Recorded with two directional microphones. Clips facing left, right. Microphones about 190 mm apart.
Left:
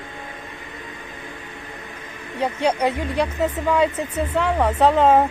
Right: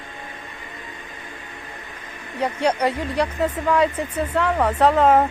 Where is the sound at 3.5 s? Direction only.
10° left (ahead or behind).